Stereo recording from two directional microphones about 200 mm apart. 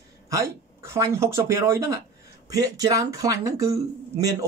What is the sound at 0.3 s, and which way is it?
Speech, 15° right (ahead or behind).